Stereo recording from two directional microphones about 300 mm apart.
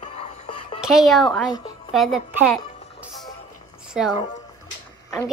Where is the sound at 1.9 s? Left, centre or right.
Centre.